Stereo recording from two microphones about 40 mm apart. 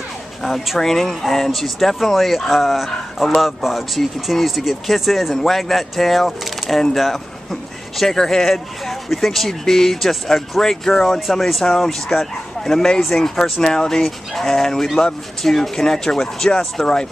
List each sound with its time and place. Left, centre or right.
0.4 s speech: centre